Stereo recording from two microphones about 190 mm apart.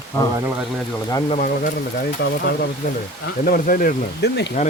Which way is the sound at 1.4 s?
45° left (ahead or behind).